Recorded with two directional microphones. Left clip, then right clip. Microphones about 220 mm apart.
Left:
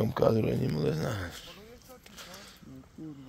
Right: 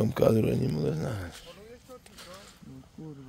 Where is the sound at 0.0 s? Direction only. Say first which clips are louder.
Right 2 dB; 35° right (ahead or behind).